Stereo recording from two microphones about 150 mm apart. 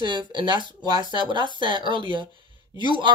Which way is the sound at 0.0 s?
30° right (ahead or behind).